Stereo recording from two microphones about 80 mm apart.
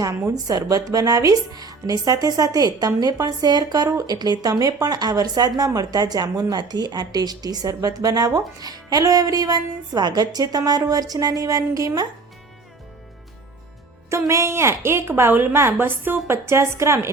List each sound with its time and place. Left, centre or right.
0.3 s a woman's voice: right
14.1 s a woman's voice: right